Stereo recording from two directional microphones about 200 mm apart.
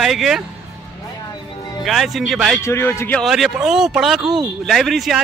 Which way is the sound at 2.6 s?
15° left (ahead or behind).